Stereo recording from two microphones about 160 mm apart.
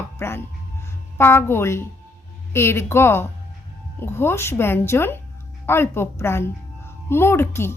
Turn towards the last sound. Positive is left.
turn(degrees=15)  # may be behind; listen again after turning